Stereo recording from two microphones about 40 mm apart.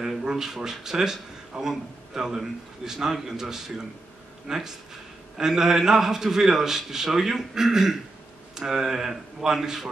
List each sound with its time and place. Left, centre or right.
0.2 s a man's voice: centre